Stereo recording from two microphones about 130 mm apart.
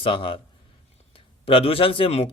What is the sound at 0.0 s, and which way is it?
Speech, 45° left (ahead or behind).